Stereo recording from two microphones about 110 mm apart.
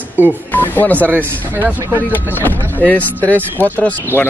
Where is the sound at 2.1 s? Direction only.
15° left (ahead or behind).